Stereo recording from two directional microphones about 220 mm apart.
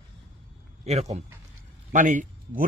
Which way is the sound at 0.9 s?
30° right (ahead or behind).